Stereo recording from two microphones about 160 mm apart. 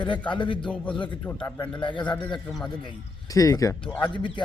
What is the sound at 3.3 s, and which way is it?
A man's voice, 20° left (ahead or behind).